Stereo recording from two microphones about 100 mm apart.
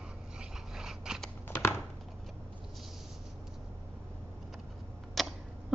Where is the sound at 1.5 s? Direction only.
25° left (ahead or behind).